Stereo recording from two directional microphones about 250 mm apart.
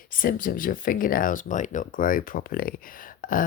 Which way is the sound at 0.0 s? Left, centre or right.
Left.